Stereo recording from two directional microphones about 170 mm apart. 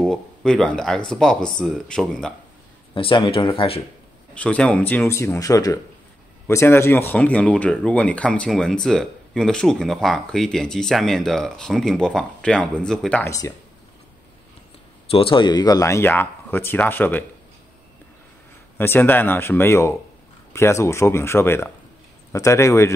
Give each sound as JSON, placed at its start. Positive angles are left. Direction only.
{"t": 0.0, "sound": "speech", "side_deg": 5}
{"t": 2.9, "sound": "speech", "side_deg": 30}
{"t": 4.3, "sound": "speech", "side_deg": 5}
{"t": 13.3, "sound": "speech", "side_deg": 20}
{"t": 15.0, "sound": "speech", "side_deg": 35}
{"t": 18.8, "sound": "speech", "side_deg": 10}